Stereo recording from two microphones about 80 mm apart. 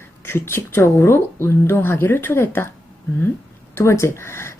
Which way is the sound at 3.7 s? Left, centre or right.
Left.